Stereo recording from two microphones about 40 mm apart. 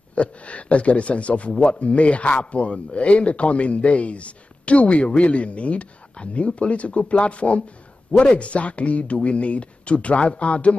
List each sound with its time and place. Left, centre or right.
0.1 s a man's voice: left